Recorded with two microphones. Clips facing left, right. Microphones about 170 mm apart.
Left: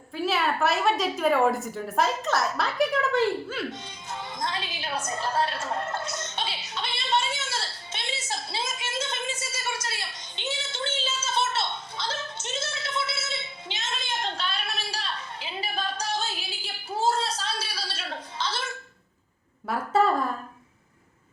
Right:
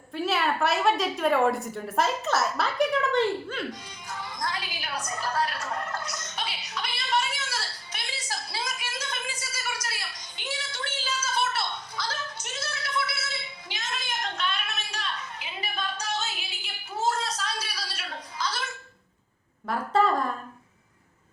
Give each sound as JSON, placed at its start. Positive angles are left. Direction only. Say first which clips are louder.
{"t": 0.1, "sound": "a woman's voice", "louder": "even", "side_deg": 0}
{"t": 3.7, "sound": "music", "louder": "left 1 dB", "side_deg": 25}
{"t": 16.6, "sound": "a sound", "louder": "left 2 dB", "side_deg": 30}